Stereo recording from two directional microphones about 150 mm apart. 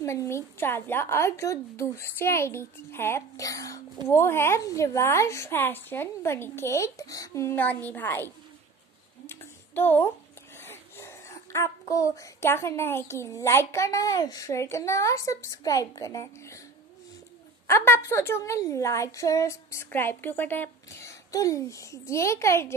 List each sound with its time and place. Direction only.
0.0 s a woman's voice: 20° left (ahead or behind)
9.2 s a sound: 15° left (ahead or behind)
10.6 s a child's voice: 15° left (ahead or behind)
17.6 s a woman's voice: 15° left (ahead or behind)